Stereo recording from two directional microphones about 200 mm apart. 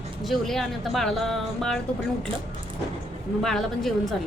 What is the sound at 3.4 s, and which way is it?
Speech, centre (ahead or behind).